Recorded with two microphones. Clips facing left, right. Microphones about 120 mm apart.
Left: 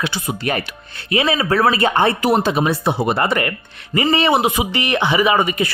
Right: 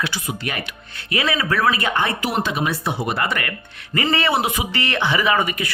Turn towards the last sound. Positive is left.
turn(degrees=25)  # may be behind; listen again after turning